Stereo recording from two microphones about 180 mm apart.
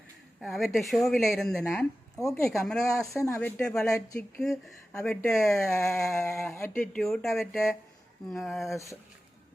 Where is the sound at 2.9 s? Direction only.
15° left (ahead or behind).